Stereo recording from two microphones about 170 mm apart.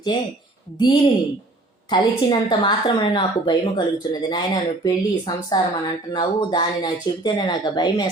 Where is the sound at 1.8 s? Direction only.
30° left (ahead or behind).